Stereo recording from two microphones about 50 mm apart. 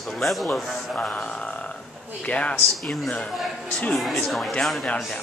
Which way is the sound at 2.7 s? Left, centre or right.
Centre.